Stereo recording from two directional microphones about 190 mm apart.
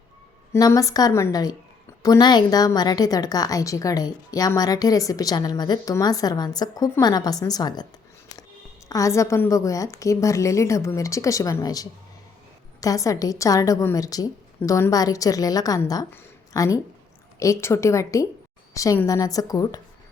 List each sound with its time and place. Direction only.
0.5 s a woman's voice: 15° left (ahead or behind)
8.9 s a woman's voice: 15° left (ahead or behind)